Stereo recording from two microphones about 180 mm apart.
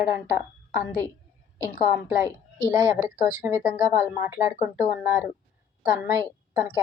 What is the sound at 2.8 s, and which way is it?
Speech, 15° right (ahead or behind).